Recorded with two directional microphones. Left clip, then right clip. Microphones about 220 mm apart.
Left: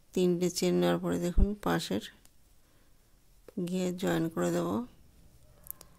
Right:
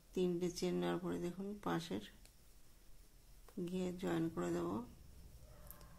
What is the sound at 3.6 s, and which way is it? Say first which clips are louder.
Speech: left 9 dB; 50° left (ahead or behind).